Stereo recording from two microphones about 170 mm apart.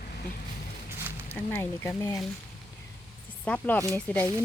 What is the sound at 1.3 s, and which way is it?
Speech, 10° left (ahead or behind).